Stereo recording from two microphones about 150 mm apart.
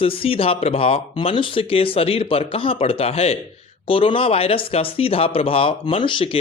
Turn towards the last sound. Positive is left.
turn(degrees=35)  # may be behind; listen again after turning